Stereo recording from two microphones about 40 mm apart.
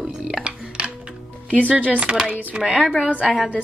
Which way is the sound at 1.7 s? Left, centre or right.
Right.